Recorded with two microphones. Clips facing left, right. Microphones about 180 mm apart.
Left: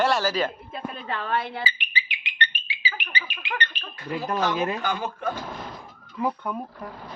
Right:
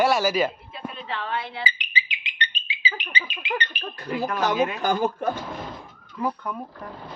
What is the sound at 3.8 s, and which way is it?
Speech, 40° right (ahead or behind).